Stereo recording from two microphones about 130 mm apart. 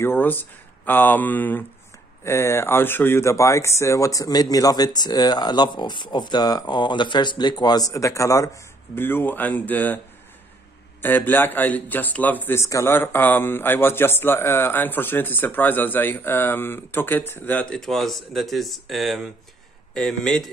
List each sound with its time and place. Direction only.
0.0 s speech: 15° left (ahead or behind)
11.0 s speech: 15° left (ahead or behind)